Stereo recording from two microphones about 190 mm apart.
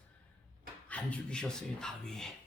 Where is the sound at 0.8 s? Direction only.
5° left (ahead or behind).